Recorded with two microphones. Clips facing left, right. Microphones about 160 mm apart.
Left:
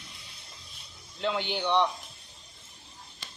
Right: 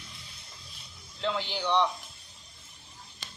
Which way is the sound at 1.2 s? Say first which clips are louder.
Left 2 dB; 5° left (ahead or behind).